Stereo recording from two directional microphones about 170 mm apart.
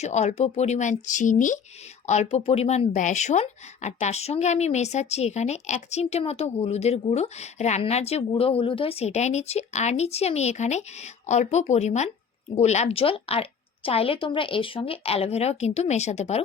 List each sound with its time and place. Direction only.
0.0 s speech: 45° left (ahead or behind)